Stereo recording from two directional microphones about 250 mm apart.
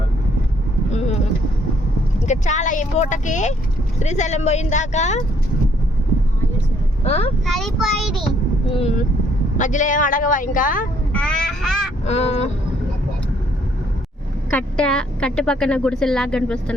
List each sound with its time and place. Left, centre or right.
0.9 s vehicle: left
2.2 s speech: left
7.0 s speech: left
7.4 s a woman's voice: centre
9.6 s speech: left
11.1 s a sound: centre
12.0 s speech: left
14.5 s a woman's voice: centre